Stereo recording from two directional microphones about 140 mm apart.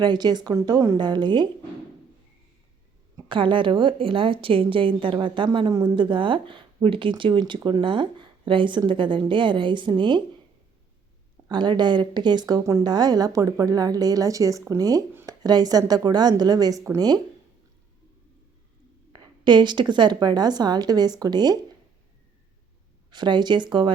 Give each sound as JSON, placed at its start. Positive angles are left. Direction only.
{"t": 0.0, "sound": "speech", "side_deg": -30}
{"t": 3.2, "sound": "speech", "side_deg": -35}
{"t": 11.4, "sound": "speech", "side_deg": -30}
{"t": 15.1, "sound": "a sound", "side_deg": -15}
{"t": 15.4, "sound": "speech", "side_deg": -30}
{"t": 19.1, "sound": "speech", "side_deg": -30}
{"t": 23.1, "sound": "speech", "side_deg": -35}